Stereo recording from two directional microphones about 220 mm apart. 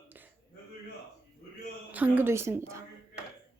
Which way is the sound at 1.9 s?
10° right (ahead or behind).